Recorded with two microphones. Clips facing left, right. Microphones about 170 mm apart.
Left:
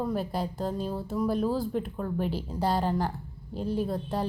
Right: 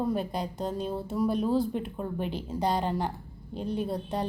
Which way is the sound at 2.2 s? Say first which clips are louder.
Left 1 dB; 5° left (ahead or behind).